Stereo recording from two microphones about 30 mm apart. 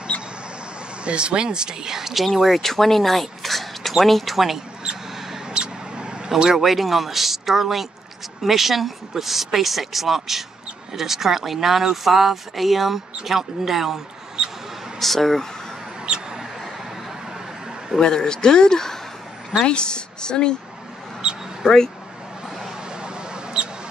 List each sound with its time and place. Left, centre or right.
1.0 s speech: right
2.0 s speech: centre
2.2 s speech: centre
5.5 s mouse: right
6.5 s speech: centre
14.4 s a sound: right
15.0 s speech: centre
18.0 s speech: left
19.6 s speech: left
21.2 s a sound: right
21.6 s speech: centre
23.0 s mouse: right